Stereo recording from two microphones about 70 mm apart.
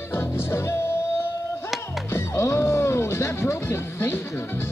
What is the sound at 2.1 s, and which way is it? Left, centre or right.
Music, left.